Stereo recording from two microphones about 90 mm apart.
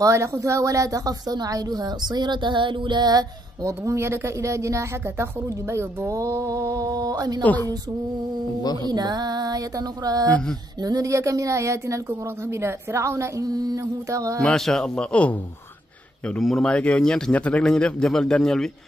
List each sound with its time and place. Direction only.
0.0 s a woman's voice: 35° right (ahead or behind)
7.4 s a man's voice: 20° left (ahead or behind)
8.8 s a woman's voice: 50° right (ahead or behind)
14.4 s a man's voice: 5° left (ahead or behind)